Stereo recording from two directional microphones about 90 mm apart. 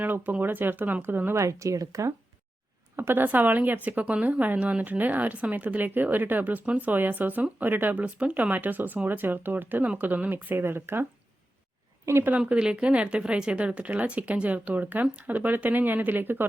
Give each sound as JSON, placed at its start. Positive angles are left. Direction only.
{"t": 0.0, "sound": "a woman's voice", "side_deg": -20}
{"t": 1.4, "sound": "speech", "side_deg": -35}
{"t": 2.9, "sound": "a woman's voice", "side_deg": -25}
{"t": 12.0, "sound": "speech", "side_deg": -30}
{"t": 12.4, "sound": "speech", "side_deg": -10}